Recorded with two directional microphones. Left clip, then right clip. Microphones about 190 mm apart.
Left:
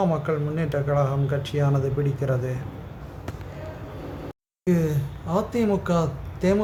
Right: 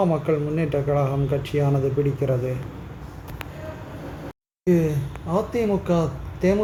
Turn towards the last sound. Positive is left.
turn(degrees=0)  # may be behind; listen again after turning